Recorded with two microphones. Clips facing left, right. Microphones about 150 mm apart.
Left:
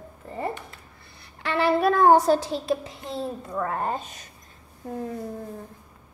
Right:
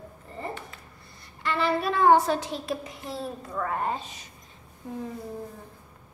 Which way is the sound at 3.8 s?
45° left (ahead or behind).